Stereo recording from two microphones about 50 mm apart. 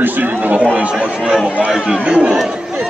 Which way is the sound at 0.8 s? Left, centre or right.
Right.